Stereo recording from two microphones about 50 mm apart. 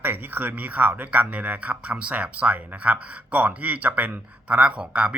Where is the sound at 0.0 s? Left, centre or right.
Right.